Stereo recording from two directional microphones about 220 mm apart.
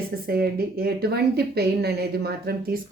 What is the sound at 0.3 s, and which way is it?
Speech, 45° right (ahead or behind).